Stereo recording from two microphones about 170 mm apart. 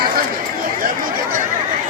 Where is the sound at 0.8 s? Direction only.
55° right (ahead or behind).